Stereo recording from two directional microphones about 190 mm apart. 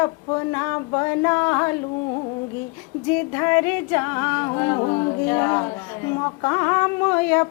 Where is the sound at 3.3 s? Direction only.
15° left (ahead or behind).